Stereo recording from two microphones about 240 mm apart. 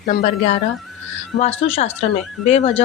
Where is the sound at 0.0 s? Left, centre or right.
Left.